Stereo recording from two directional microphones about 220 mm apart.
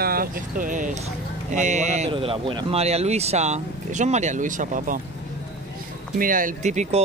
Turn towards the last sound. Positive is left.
turn(degrees=-30)  # may be behind; listen again after turning